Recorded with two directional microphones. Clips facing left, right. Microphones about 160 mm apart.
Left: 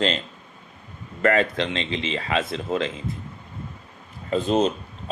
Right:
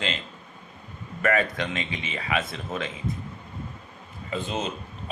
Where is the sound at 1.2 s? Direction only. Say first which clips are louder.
Left 4 dB; 30° left (ahead or behind).